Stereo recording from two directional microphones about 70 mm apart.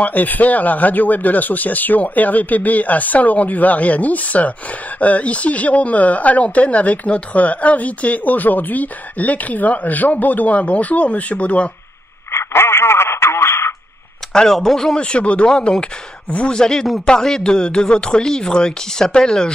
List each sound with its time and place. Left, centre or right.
0.0 s speech: left
12.3 s radio: left
14.3 s speech: centre